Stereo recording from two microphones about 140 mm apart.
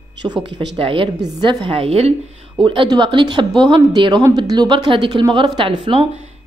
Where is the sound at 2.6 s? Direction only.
35° right (ahead or behind).